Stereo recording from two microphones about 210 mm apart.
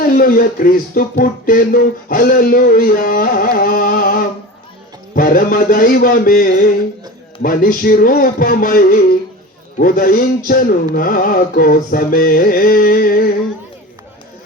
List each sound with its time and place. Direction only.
0.0 s speech: 40° left (ahead or behind)
5.1 s a sound: 40° left (ahead or behind)
7.4 s speech: 40° left (ahead or behind)